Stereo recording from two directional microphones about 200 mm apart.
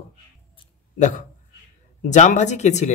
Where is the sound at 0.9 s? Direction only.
35° left (ahead or behind).